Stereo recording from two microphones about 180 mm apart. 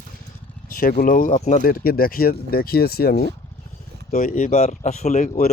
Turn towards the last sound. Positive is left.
turn(degrees=45)  # may be behind; listen again after turning